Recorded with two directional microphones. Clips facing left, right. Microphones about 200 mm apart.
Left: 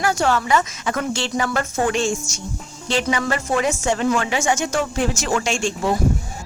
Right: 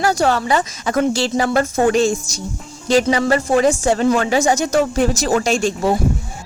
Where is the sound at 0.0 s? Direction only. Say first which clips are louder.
Right 3 dB; 35° right (ahead or behind).